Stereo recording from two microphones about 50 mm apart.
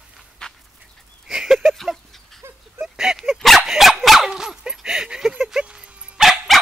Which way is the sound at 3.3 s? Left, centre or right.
Centre.